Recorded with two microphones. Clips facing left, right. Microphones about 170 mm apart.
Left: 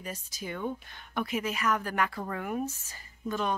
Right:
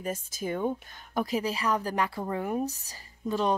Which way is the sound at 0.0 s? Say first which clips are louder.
Right 7 dB; 50° right (ahead or behind).